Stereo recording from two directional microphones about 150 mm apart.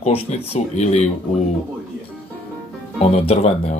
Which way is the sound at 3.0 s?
45° left (ahead or behind).